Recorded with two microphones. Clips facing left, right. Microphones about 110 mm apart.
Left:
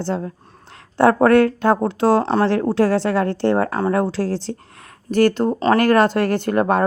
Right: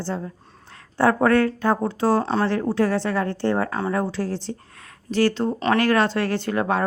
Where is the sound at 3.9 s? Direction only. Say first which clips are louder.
Left 5 dB; 90° left.